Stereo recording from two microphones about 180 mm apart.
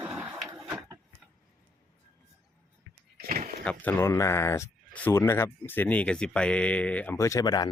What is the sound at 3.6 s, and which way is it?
Speech, 10° left (ahead or behind).